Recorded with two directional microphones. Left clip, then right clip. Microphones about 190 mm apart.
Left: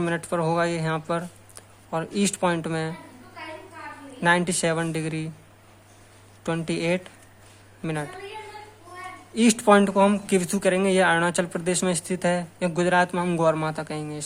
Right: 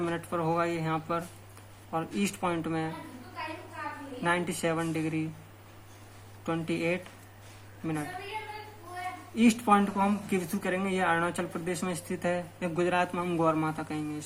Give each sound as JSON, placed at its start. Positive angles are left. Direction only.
{"t": 0.0, "sound": "speech", "side_deg": 55}
{"t": 4.2, "sound": "speech", "side_deg": 55}
{"t": 6.4, "sound": "speech", "side_deg": 55}
{"t": 9.3, "sound": "speech", "side_deg": 55}